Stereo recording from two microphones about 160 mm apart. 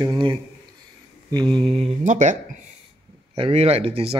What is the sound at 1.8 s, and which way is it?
Speech, 50° right (ahead or behind).